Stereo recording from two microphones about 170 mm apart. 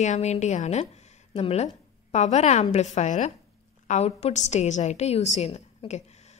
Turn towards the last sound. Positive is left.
turn(degrees=40)  # may be behind; listen again after turning